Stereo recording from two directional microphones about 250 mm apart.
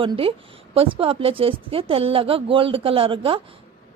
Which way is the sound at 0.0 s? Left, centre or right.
Right.